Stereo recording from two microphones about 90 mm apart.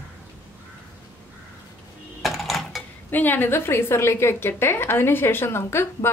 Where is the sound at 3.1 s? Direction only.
20° left (ahead or behind).